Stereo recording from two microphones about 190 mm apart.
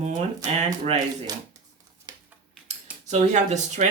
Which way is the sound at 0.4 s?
35° right (ahead or behind).